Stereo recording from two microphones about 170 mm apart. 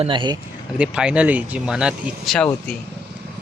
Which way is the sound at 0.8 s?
5° right (ahead or behind).